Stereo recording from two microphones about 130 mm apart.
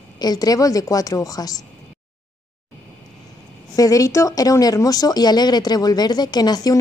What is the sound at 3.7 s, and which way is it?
Speech, 25° left (ahead or behind).